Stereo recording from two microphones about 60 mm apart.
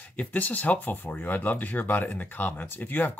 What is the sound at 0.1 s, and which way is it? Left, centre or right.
Speech, left.